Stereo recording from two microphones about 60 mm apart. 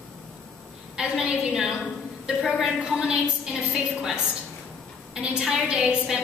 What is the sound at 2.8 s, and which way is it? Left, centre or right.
A woman's voice, centre.